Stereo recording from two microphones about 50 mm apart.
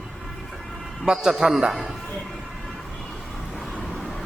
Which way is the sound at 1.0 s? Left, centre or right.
Centre.